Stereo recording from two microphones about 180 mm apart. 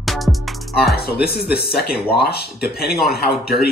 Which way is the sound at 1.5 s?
60° left (ahead or behind).